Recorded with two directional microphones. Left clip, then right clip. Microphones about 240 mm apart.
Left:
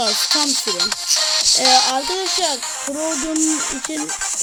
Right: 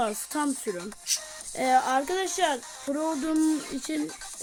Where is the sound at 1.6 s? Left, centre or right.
Centre.